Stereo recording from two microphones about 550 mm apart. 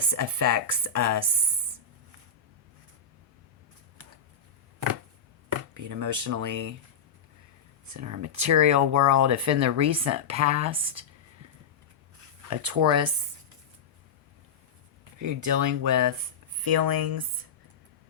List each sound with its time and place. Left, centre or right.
0.1 s speech: right
5.5 s speech: right
7.9 s speech: right
12.5 s speech: right
15.5 s speech: right